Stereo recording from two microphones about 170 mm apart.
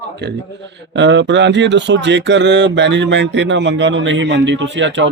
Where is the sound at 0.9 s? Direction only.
90° right.